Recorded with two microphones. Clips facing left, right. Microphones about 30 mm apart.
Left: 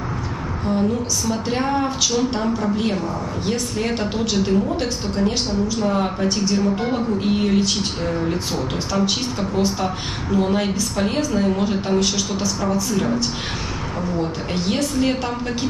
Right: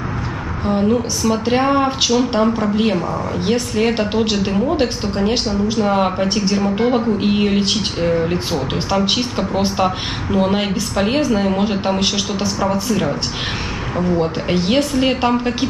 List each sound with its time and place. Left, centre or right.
0.7 s speech: right